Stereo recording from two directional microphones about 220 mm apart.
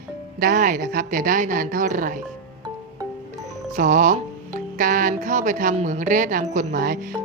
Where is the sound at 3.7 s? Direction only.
35° right (ahead or behind).